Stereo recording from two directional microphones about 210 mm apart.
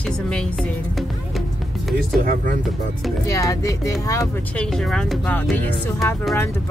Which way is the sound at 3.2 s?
15° left (ahead or behind).